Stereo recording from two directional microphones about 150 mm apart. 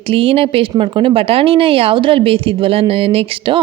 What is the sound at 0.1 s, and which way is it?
A woman's voice, 40° right (ahead or behind).